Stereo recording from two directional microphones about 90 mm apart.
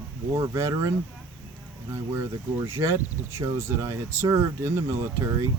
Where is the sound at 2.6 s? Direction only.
25° right (ahead or behind).